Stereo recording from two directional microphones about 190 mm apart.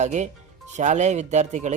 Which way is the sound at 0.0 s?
40° right (ahead or behind).